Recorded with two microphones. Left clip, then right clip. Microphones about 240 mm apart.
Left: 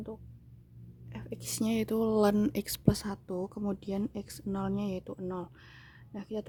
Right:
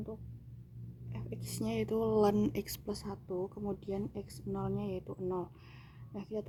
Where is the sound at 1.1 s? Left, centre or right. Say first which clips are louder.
Left 5 dB; left.